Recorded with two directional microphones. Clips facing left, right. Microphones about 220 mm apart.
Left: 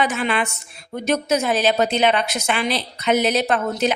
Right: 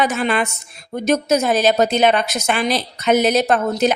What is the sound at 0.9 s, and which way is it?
A woman's voice, 45° right (ahead or behind).